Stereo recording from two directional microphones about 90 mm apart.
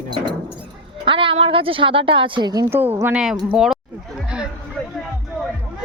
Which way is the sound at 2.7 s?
25° right (ahead or behind).